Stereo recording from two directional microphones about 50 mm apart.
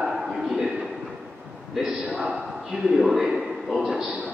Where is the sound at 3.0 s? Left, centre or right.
Centre.